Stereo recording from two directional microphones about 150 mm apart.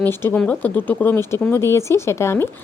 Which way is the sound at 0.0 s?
15° left (ahead or behind).